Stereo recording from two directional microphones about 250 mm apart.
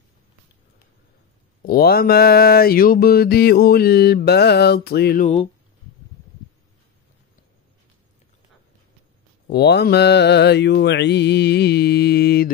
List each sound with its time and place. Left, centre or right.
1.6 s mantra: left
9.5 s mantra: left